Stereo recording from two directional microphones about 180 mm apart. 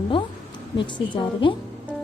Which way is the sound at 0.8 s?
25° left (ahead or behind).